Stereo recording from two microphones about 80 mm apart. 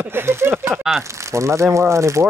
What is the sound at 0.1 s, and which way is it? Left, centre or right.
Speech, right.